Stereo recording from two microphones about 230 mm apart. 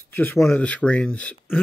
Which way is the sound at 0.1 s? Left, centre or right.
Centre.